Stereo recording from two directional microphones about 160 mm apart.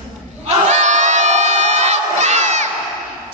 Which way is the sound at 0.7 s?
45° right (ahead or behind).